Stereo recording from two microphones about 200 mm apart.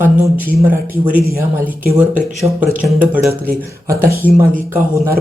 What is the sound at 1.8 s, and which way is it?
Speech, 5° right (ahead or behind).